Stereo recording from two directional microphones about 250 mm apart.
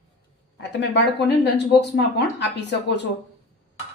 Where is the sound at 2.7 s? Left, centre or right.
Left.